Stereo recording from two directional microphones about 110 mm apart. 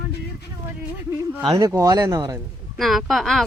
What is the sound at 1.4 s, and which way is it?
Speech, 35° right (ahead or behind).